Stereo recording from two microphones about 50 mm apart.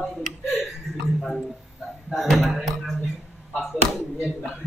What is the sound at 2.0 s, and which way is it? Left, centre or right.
Speech, centre.